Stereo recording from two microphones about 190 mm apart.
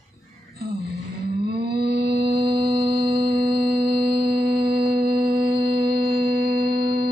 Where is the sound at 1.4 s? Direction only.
55° right (ahead or behind).